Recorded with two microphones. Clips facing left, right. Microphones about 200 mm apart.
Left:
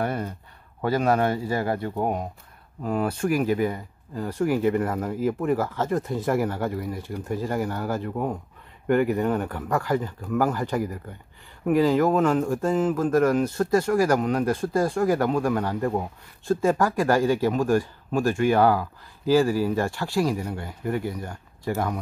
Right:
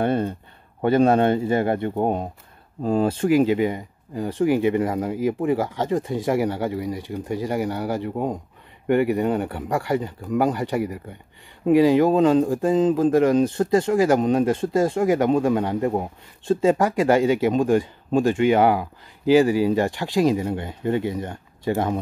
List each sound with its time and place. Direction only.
0.0 s speech: 25° right (ahead or behind)
11.8 s speech: 15° right (ahead or behind)